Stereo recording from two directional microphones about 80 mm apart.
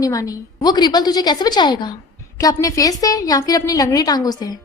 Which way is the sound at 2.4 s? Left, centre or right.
Left.